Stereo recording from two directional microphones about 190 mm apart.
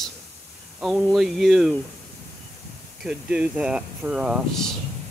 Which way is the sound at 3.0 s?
5° right (ahead or behind).